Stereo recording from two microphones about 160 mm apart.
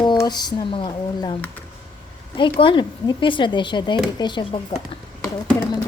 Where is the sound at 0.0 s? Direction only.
25° left (ahead or behind).